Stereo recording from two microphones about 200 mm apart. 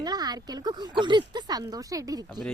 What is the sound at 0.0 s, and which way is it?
A woman's voice, 20° right (ahead or behind).